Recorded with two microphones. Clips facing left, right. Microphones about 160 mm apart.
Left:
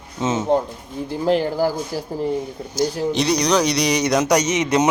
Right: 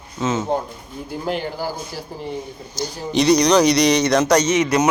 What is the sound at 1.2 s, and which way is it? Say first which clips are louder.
Speech: left 7 dB; 40° left (ahead or behind).